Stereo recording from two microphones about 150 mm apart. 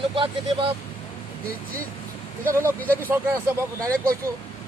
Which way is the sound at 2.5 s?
15° right (ahead or behind).